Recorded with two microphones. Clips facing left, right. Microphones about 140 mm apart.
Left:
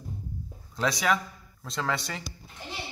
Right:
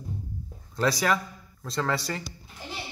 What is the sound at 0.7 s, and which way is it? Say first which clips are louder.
A man's voice: right 2 dB; centre (ahead or behind).